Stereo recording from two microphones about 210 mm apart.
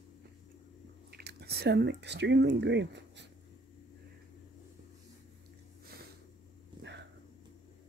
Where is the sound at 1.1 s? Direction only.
50° right (ahead or behind).